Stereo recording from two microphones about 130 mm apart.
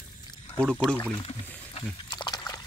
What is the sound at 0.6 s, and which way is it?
Speech, 5° left (ahead or behind).